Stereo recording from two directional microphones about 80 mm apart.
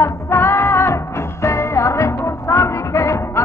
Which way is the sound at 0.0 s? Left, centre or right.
Left.